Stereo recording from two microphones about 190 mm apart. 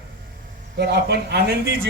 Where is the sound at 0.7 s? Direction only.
60° right (ahead or behind).